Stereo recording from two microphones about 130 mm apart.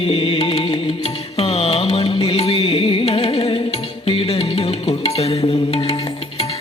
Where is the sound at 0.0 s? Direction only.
45° left (ahead or behind).